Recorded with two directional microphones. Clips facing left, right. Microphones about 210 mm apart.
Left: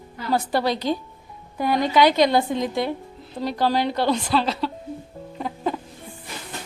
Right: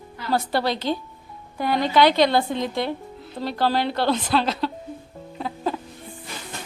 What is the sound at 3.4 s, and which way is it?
A woman's voice, 15° left (ahead or behind).